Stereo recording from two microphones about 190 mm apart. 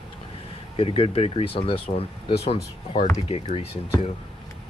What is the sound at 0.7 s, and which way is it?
Speech, 30° left (ahead or behind).